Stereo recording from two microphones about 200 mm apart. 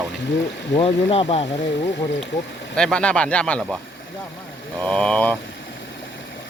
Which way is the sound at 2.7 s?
5° left (ahead or behind).